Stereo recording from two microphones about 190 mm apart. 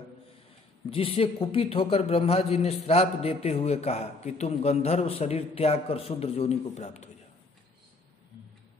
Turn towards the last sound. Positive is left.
turn(degrees=35)  # may be behind; listen again after turning